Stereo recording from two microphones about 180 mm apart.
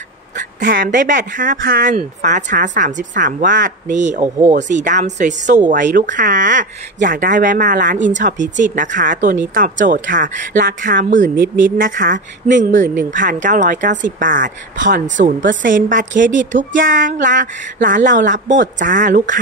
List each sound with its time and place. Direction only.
0.4 s speech: 50° right (ahead or behind)